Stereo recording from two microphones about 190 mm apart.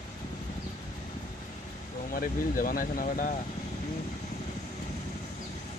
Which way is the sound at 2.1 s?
50° left (ahead or behind).